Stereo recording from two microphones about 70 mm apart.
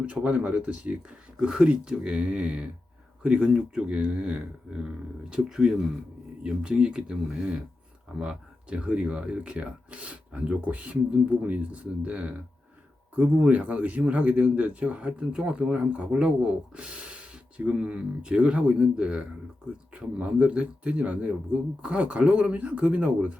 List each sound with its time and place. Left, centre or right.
0.0 s a man's voice: centre